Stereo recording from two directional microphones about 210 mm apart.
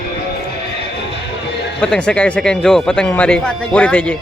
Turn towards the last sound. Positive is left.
turn(degrees=5)  # may be behind; listen again after turning